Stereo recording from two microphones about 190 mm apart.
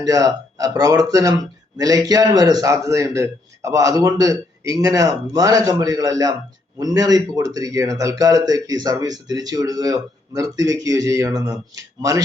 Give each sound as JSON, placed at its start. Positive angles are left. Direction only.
{"t": 0.0, "sound": "a man's voice", "side_deg": -20}